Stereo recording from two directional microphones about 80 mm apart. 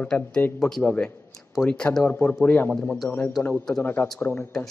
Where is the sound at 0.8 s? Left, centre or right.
Centre.